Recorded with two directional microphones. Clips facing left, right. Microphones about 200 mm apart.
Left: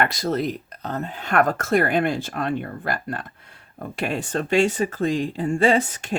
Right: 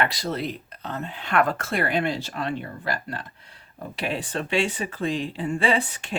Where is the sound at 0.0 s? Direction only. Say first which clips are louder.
Left 4 dB; 45° left (ahead or behind).